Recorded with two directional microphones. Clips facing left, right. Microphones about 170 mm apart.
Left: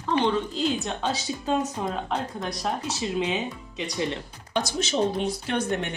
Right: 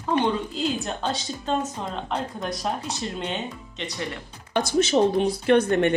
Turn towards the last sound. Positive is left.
turn(degrees=-60)  # may be behind; listen again after turning